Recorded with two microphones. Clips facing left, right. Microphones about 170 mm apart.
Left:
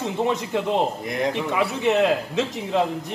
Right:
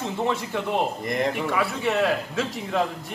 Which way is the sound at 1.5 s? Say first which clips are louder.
Left 3 dB; 20° left (ahead or behind).